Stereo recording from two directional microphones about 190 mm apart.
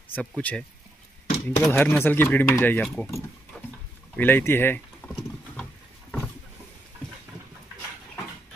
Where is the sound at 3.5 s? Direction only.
5° left (ahead or behind).